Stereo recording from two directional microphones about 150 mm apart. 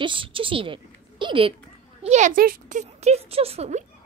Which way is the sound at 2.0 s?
55° right (ahead or behind).